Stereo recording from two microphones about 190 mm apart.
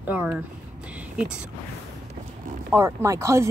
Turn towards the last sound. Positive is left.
turn(degrees=-15)  # may be behind; listen again after turning